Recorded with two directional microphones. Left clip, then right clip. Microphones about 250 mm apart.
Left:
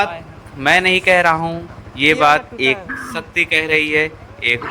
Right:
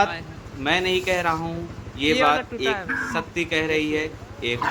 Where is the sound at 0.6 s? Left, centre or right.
Centre.